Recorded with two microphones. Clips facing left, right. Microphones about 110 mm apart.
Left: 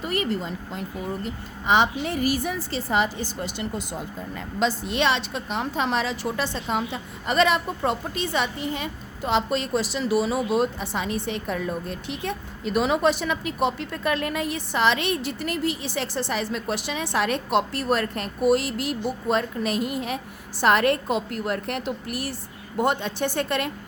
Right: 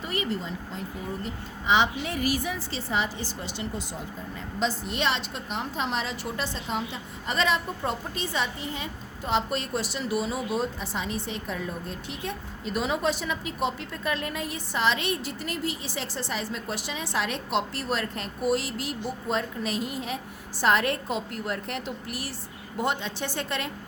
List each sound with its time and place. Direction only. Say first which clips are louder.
0.0 s a woman's voice: left 4 dB; 55° left (ahead or behind)
4.4 s a woman's voice: left 4 dB; 80° left; by 23.7 s 55° left (ahead or behind)